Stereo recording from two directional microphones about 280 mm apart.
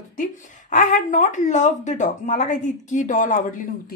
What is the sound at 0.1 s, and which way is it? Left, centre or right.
A woman's voice, left.